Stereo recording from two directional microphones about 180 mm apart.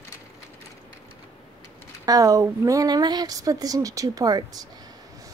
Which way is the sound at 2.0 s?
20° right (ahead or behind).